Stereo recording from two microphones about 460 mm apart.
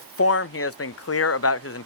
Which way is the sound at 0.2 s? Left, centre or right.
Left.